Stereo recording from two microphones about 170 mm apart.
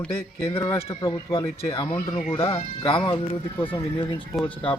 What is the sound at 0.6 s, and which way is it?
Speech, 30° left (ahead or behind).